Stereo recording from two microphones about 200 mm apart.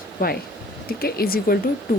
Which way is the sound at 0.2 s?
45° left (ahead or behind).